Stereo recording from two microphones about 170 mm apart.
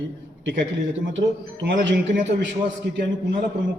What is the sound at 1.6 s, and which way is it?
Speech, 90° right.